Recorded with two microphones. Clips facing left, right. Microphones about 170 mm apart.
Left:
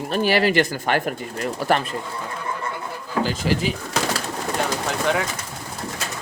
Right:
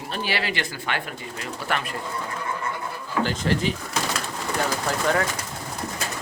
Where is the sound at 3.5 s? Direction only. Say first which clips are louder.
Left 1 dB; 10° left (ahead or behind).